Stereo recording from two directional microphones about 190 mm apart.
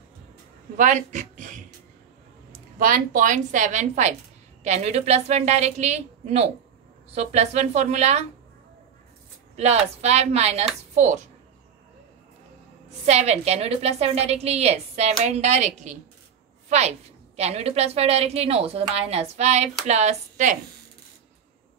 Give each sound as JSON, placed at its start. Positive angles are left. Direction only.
{"t": 0.7, "sound": "a woman's voice", "side_deg": -40}
{"t": 2.8, "sound": "a woman's voice", "side_deg": -45}
{"t": 9.6, "sound": "a woman's voice", "side_deg": -35}
{"t": 13.0, "sound": "a woman's voice", "side_deg": -35}